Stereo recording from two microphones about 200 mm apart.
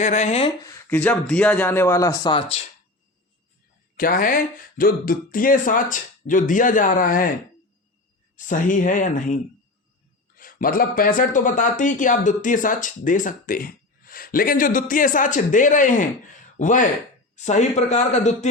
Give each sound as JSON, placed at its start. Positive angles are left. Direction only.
{"t": 0.0, "sound": "speech", "side_deg": 35}
{"t": 0.6, "sound": "speech", "side_deg": 15}
{"t": 3.9, "sound": "speech", "side_deg": 45}
{"t": 8.4, "sound": "speech", "side_deg": 40}